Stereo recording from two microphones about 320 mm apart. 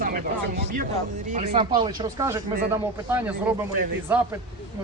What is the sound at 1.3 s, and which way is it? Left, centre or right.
Speech, centre.